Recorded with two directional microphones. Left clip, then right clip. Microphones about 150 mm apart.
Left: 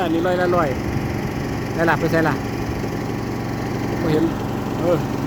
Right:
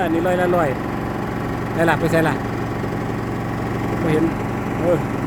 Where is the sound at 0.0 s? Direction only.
Centre (ahead or behind).